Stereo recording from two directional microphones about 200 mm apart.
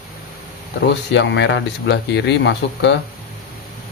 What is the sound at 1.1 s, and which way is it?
Speech, 65° left (ahead or behind).